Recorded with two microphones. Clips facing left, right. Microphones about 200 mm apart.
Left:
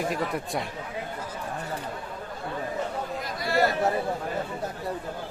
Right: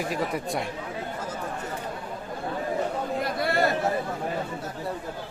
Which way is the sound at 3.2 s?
60° right (ahead or behind).